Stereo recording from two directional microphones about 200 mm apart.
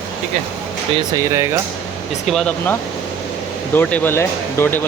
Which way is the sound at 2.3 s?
5° left (ahead or behind).